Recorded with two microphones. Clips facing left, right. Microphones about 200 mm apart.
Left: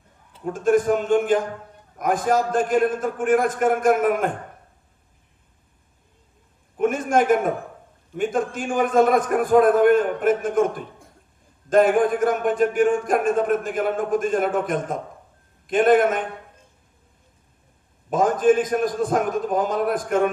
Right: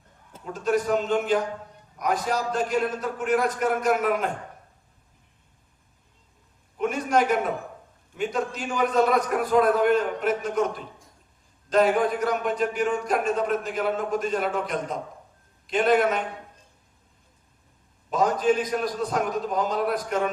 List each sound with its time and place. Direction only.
0.4 s a man's voice: 50° left (ahead or behind)
6.7 s a sound: 50° left (ahead or behind)
8.1 s a man's voice: 50° left (ahead or behind)
18.1 s a man's voice: 50° left (ahead or behind)